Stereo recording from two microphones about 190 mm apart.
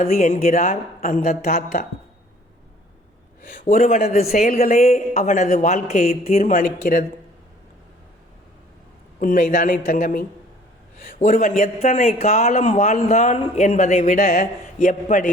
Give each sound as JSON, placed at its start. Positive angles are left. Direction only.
{"t": 0.1, "sound": "speech", "side_deg": 40}
{"t": 3.4, "sound": "a woman's voice", "side_deg": 45}
{"t": 9.2, "sound": "a woman's voice", "side_deg": 45}